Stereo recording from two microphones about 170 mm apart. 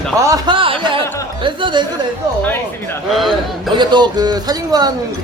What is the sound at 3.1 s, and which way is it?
Speech, centre (ahead or behind).